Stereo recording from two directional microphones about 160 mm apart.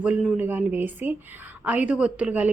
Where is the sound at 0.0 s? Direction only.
5° right (ahead or behind).